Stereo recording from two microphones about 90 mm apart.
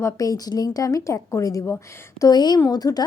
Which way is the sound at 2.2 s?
50° left (ahead or behind).